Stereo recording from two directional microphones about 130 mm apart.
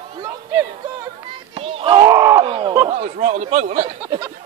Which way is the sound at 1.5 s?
45° right (ahead or behind).